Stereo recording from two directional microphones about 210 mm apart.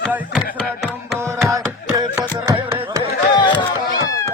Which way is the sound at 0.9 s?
10° right (ahead or behind).